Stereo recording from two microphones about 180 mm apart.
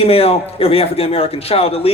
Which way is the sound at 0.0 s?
35° left (ahead or behind).